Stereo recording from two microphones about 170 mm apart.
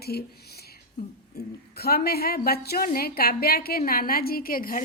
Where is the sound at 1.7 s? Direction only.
65° left (ahead or behind).